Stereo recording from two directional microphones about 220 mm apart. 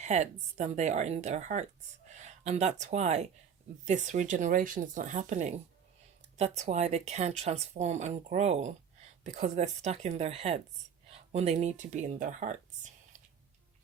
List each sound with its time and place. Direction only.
0.0 s a woman's voice: 30° right (ahead or behind)